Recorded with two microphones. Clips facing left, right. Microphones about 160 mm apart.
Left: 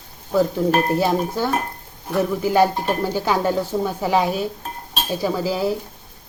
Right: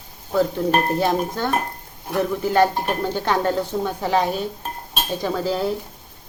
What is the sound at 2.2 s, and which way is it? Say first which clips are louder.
A woman's voice: left 1 dB; 5° left (ahead or behind).